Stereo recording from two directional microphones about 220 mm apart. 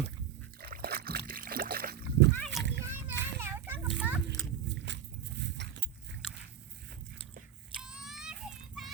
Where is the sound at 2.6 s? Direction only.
55° right (ahead or behind).